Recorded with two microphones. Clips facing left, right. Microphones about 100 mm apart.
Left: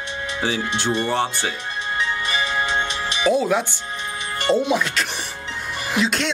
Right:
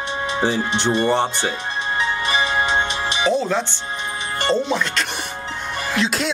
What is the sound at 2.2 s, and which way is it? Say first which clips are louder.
Music: right 3 dB; 30° right (ahead or behind).